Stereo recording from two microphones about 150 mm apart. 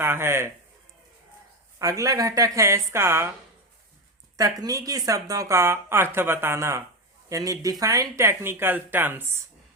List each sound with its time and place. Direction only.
0.0 s speech: 15° right (ahead or behind)
1.8 s speech: 20° right (ahead or behind)
4.4 s speech: 25° right (ahead or behind)